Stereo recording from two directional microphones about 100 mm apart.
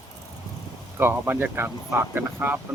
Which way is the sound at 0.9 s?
20° right (ahead or behind).